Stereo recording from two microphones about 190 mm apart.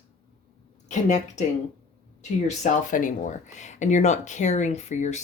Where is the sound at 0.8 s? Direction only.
40° left (ahead or behind).